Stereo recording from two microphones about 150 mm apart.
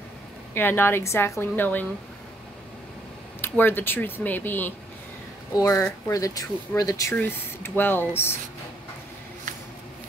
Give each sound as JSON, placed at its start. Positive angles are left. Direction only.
{"t": 0.6, "sound": "speech", "side_deg": 15}
{"t": 3.3, "sound": "speech", "side_deg": 15}